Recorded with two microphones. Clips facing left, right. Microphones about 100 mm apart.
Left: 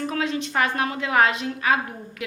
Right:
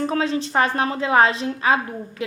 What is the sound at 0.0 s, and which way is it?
A woman's voice, 30° right (ahead or behind).